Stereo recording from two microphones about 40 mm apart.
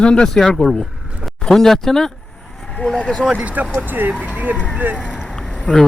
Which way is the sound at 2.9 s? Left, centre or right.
Left.